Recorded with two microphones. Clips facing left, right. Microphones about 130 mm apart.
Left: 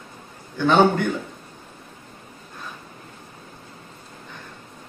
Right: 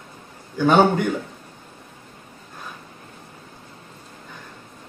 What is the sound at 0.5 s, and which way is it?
Speech, 10° right (ahead or behind).